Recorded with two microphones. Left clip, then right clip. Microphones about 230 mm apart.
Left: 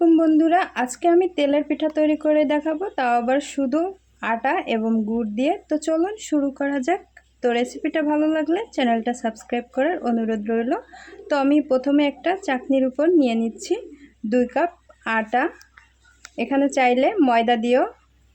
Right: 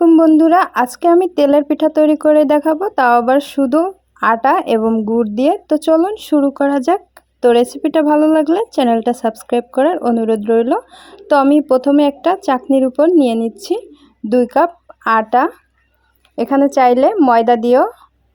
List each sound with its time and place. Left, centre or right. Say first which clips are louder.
0.0 s speech: right 8 dB; right
11.7 s speech: right 8 dB; right